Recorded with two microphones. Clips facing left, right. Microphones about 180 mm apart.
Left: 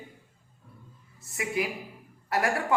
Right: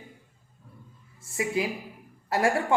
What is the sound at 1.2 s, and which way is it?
A woman's voice, 25° right (ahead or behind).